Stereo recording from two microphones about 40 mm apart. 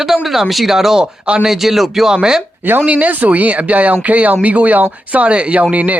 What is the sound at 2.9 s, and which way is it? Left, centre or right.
Speech, right.